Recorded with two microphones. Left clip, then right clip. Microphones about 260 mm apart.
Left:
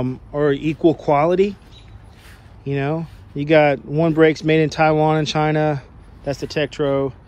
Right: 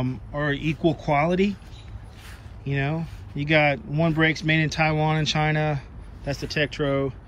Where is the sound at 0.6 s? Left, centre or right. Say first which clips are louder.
Left 7 dB; left.